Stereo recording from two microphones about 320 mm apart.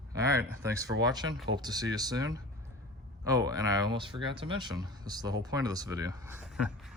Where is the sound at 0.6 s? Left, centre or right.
Centre.